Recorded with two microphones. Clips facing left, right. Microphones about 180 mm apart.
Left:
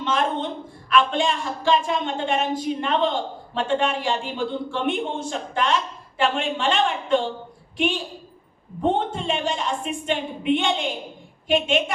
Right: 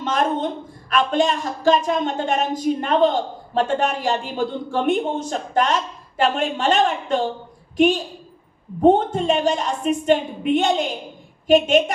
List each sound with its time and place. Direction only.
0.0 s a woman's voice: 40° right (ahead or behind)